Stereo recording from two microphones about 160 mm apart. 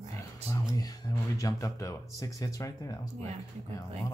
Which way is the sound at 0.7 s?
25° left (ahead or behind).